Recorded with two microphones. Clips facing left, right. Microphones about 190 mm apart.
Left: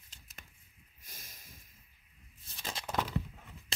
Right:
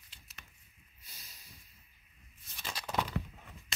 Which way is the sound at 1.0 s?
50° left (ahead or behind).